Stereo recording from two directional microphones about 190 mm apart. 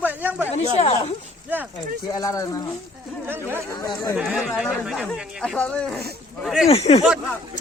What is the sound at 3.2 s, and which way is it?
Speech, 10° right (ahead or behind).